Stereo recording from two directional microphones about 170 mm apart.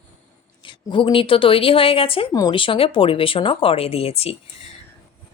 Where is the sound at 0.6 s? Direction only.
30° left (ahead or behind).